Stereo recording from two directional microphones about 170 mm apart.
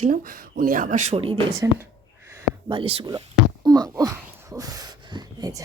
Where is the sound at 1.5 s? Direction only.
20° right (ahead or behind).